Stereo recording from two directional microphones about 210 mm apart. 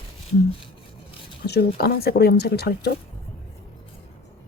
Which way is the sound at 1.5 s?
50° left (ahead or behind).